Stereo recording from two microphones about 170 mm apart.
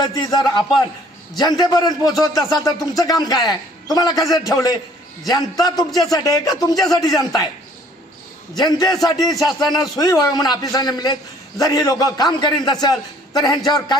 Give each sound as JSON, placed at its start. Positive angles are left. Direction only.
{"t": 0.0, "sound": "a man's voice", "side_deg": 25}
{"t": 8.5, "sound": "a man's voice", "side_deg": 25}